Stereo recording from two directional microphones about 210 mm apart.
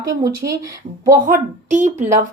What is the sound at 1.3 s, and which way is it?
Speech, 35° right (ahead or behind).